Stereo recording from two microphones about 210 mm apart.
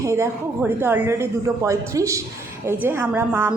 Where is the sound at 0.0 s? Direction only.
15° right (ahead or behind).